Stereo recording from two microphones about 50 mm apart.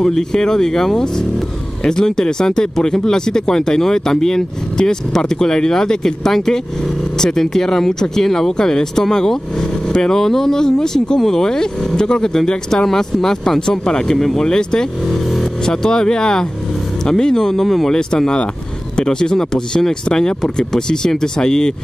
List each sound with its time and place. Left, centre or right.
0.0 s speech: centre